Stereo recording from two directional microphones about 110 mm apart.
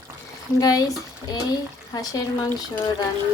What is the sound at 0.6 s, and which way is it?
Speech, 35° left (ahead or behind).